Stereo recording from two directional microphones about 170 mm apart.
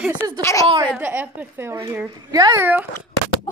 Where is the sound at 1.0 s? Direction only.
10° right (ahead or behind).